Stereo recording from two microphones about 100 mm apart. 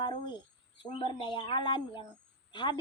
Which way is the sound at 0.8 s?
60° left (ahead or behind).